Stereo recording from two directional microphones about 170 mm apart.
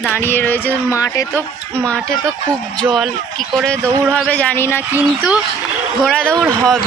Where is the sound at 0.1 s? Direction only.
15° left (ahead or behind).